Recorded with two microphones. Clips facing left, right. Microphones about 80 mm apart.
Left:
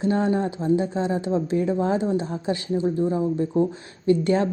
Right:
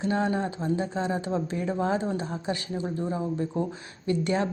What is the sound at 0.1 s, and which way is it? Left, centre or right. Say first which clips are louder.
Speech: left 4 dB; left.